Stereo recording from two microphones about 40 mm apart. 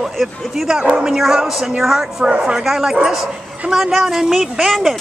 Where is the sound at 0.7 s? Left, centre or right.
Centre.